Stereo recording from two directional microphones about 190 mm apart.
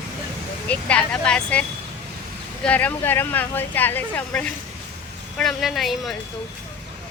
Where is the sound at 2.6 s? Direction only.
10° left (ahead or behind).